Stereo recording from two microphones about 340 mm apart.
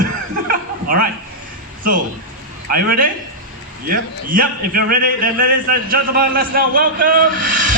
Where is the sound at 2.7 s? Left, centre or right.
Right.